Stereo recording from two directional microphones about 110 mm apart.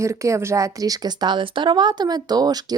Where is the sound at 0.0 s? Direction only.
25° right (ahead or behind).